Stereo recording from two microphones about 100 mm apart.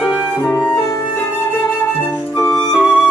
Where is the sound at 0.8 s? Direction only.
30° left (ahead or behind).